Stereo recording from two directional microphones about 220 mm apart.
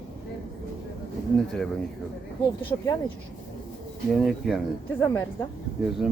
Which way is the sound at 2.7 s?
15° left (ahead or behind).